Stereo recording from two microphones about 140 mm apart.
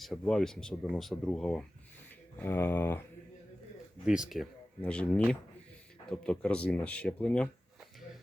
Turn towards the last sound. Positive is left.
turn(degrees=5)  # may be behind; listen again after turning